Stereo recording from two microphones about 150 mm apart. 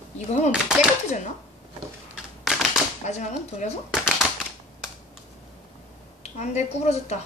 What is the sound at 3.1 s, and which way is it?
Speech, 50° left (ahead or behind).